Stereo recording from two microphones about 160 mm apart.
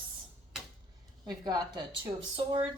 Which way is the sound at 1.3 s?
25° right (ahead or behind).